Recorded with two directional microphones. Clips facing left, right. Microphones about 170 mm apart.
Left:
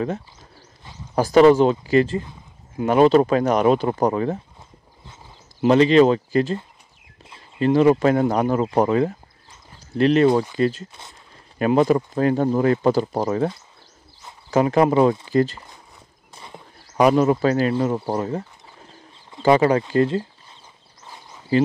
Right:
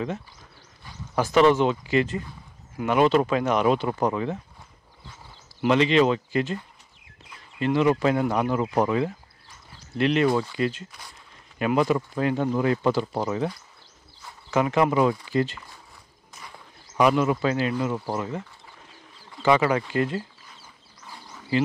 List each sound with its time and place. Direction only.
1.1 s speech: 35° left (ahead or behind)
5.7 s speech: 40° left (ahead or behind)
10.2 s speech: 20° left (ahead or behind)
10.6 s speech: 40° left (ahead or behind)
10.9 s speech: 25° left (ahead or behind)
11.5 s speech: 40° left (ahead or behind)
14.5 s speech: 35° left (ahead or behind)
16.3 s walk: 30° left (ahead or behind)
17.0 s speech: 35° left (ahead or behind)
17.7 s speech: 30° left (ahead or behind)
19.4 s speech: 35° left (ahead or behind)
21.0 s a sound: 20° left (ahead or behind)